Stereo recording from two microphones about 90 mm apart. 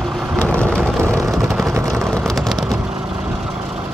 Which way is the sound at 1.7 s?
30° right (ahead or behind).